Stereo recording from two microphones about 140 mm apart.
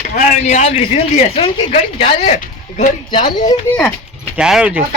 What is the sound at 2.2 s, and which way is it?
Speech, 60° left (ahead or behind).